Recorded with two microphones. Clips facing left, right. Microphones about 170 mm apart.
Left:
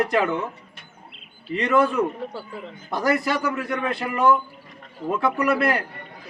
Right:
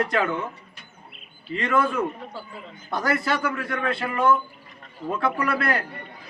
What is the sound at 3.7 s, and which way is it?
Speech, 15° left (ahead or behind).